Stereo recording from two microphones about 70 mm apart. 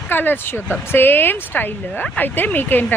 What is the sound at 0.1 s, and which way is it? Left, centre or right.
Speech, left.